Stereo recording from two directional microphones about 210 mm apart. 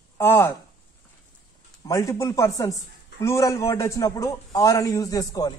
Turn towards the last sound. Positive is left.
turn(degrees=15)  # may be behind; listen again after turning